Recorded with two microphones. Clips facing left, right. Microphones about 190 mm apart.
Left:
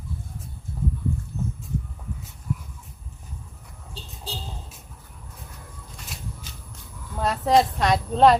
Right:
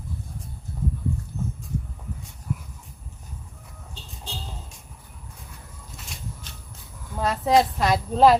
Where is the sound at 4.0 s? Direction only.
35° left (ahead or behind).